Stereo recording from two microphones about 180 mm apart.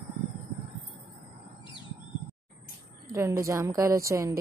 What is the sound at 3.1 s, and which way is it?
A woman's voice, 15° right (ahead or behind).